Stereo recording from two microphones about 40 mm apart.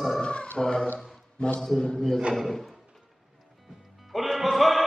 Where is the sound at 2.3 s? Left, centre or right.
Centre.